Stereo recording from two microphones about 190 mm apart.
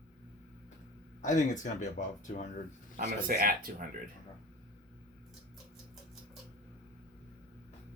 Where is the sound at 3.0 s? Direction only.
50° right (ahead or behind).